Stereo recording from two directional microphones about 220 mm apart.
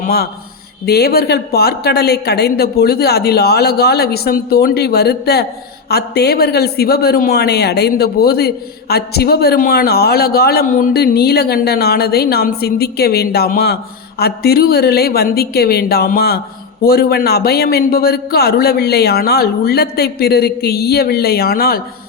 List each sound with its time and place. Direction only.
0.0 s a man's voice: 45° left (ahead or behind)